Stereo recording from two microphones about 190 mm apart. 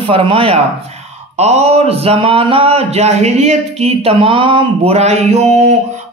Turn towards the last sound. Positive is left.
turn(degrees=-35)  # may be behind; listen again after turning